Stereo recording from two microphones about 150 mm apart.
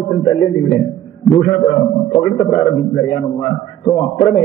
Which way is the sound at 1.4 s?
25° left (ahead or behind).